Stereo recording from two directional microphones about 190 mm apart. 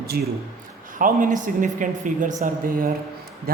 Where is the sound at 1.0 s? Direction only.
45° right (ahead or behind).